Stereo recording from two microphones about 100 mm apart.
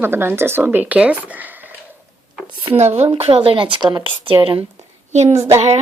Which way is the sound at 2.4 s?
60° right (ahead or behind).